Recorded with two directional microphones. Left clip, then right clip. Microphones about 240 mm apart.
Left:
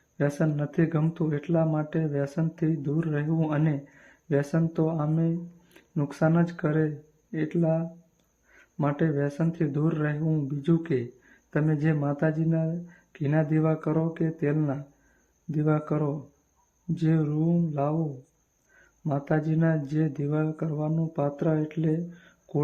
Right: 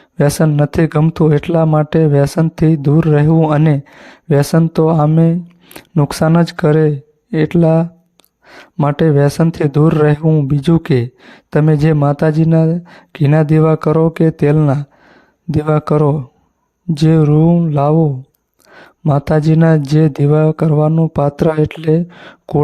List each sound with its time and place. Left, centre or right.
0.2 s speech: right
19.0 s speech: right